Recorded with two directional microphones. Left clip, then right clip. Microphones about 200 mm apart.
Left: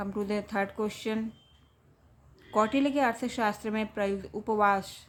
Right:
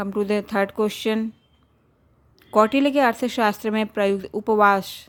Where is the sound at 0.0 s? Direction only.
45° right (ahead or behind).